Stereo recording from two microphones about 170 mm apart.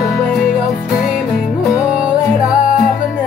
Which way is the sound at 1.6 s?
5° right (ahead or behind).